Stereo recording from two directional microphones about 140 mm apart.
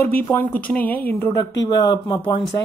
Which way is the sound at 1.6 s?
30° left (ahead or behind).